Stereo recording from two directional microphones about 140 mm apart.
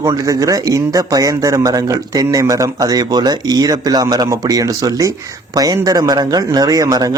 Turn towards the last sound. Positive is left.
turn(degrees=-25)  # may be behind; listen again after turning